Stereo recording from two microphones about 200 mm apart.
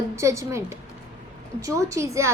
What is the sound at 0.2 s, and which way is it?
Speech, 15° right (ahead or behind).